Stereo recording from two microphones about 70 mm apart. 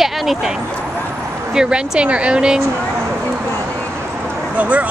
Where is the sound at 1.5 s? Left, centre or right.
Centre.